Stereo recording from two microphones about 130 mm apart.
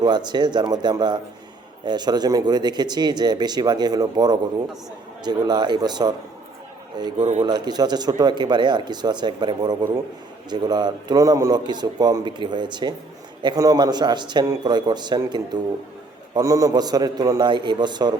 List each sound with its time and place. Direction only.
0.0 s speech: 35° right (ahead or behind)